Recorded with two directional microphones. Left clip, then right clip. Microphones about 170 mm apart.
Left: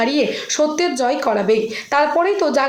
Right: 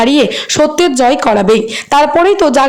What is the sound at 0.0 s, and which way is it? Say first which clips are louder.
A woman's voice: right 8 dB; 55° right (ahead or behind).